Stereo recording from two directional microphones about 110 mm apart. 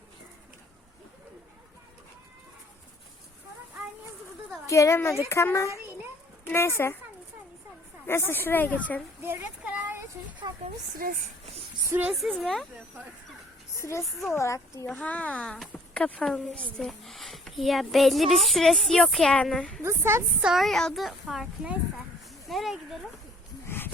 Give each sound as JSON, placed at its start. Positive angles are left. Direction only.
{"t": 4.6, "sound": "a woman's voice", "side_deg": 30}
{"t": 8.0, "sound": "speech", "side_deg": 20}
{"t": 9.6, "sound": "a sound", "side_deg": -15}
{"t": 10.4, "sound": "speech", "side_deg": -40}
{"t": 11.9, "sound": "speech", "side_deg": -15}
{"t": 12.1, "sound": "a child's voice", "side_deg": 0}
{"t": 13.7, "sound": "a woman's voice", "side_deg": 30}
{"t": 14.8, "sound": "a child's voice", "side_deg": 10}
{"t": 19.8, "sound": "a woman's voice", "side_deg": -25}
{"t": 20.4, "sound": "a child's voice", "side_deg": -5}
{"t": 23.6, "sound": "livestock", "side_deg": 20}